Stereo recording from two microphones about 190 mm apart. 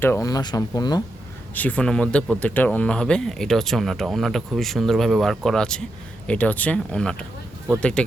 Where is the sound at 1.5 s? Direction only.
10° left (ahead or behind).